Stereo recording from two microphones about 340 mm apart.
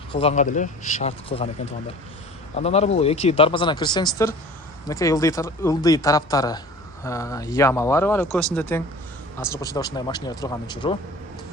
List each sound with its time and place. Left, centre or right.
0.1 s speech: centre